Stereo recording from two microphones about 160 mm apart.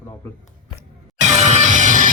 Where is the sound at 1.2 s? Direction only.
45° right (ahead or behind).